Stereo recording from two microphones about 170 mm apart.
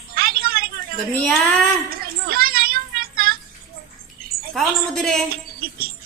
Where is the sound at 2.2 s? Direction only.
60° right (ahead or behind).